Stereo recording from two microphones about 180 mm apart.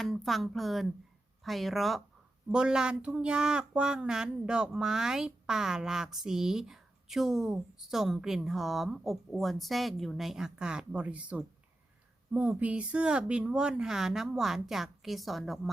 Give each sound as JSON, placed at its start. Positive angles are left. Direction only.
{"t": 0.0, "sound": "speech", "side_deg": 0}